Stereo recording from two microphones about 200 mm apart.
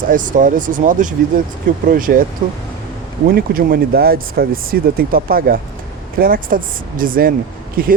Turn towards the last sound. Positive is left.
turn(degrees=-45)  # may be behind; listen again after turning